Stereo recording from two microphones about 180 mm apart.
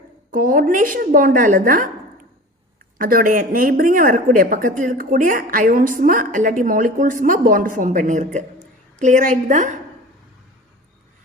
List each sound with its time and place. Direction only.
0.3 s a woman's voice: 50° right (ahead or behind)
3.0 s a woman's voice: 50° right (ahead or behind)